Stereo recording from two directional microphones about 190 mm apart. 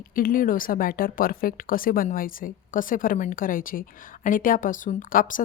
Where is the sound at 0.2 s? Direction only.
50° left (ahead or behind).